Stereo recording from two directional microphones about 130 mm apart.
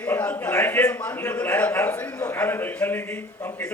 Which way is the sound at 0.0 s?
10° left (ahead or behind).